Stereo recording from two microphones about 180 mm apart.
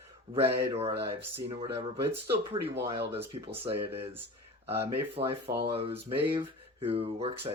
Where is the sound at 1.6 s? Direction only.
20° right (ahead or behind).